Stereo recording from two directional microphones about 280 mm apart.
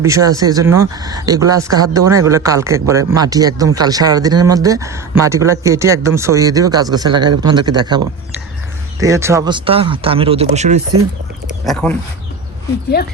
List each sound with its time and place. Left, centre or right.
0.0 s speech: centre
11.6 s speech: centre